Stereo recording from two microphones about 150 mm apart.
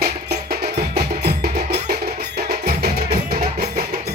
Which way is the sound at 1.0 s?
90° right.